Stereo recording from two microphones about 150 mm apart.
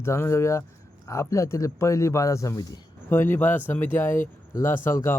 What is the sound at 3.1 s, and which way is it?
Speech, 15° left (ahead or behind).